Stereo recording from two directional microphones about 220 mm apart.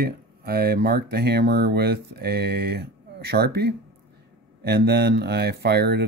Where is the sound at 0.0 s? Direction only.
45° right (ahead or behind).